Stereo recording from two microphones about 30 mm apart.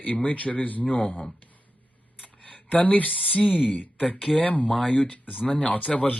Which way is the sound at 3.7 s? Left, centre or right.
Left.